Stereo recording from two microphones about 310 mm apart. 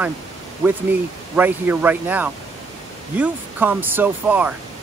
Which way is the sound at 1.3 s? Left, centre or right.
Centre.